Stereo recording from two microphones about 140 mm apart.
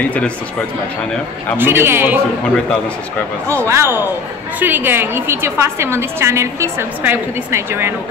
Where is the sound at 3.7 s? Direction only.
20° right (ahead or behind).